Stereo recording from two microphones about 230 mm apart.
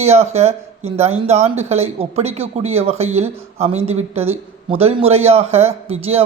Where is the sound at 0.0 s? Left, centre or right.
Right.